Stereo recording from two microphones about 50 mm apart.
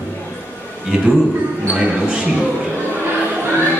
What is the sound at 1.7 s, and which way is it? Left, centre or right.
Speech, right.